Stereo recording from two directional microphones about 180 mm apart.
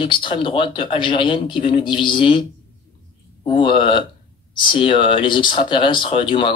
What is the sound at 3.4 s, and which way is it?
Speech, 30° left (ahead or behind).